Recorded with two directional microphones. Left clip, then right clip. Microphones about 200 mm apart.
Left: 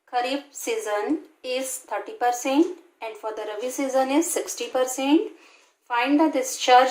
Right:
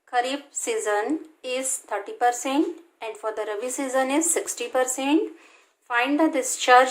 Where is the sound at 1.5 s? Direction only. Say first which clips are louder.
Even; 35° right (ahead or behind).